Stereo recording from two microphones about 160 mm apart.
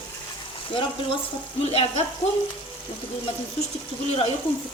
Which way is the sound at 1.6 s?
35° left (ahead or behind).